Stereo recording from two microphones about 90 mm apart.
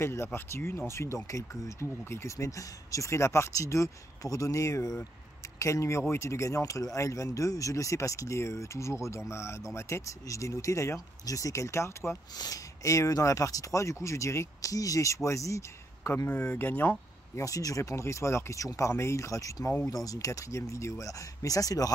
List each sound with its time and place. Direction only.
0.0 s speech: 30° left (ahead or behind)
12.4 s speech: 40° left (ahead or behind)
16.3 s speech: 15° left (ahead or behind)
17.4 s speech: 40° left (ahead or behind)